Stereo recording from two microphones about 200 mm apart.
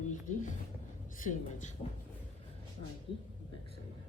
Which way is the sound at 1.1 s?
40° left (ahead or behind).